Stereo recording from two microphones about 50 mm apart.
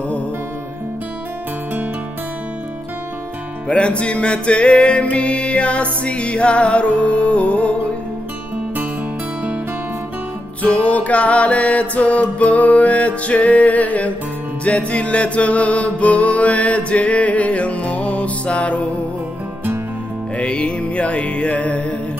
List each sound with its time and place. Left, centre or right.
3.6 s music: left
10.6 s music: left
20.3 s music: left